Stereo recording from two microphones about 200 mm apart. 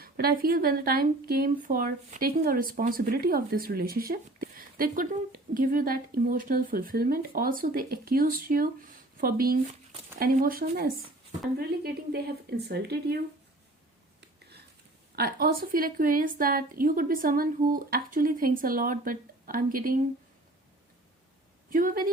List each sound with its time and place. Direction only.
0.0 s speech: 50° right (ahead or behind)
15.1 s speech: 50° right (ahead or behind)
21.7 s speech: 45° right (ahead or behind)